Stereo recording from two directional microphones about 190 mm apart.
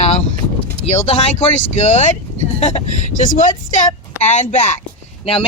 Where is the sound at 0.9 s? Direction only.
35° left (ahead or behind).